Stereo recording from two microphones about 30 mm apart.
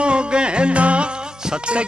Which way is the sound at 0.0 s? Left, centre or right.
Right.